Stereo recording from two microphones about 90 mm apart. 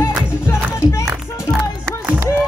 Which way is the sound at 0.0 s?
30° left (ahead or behind).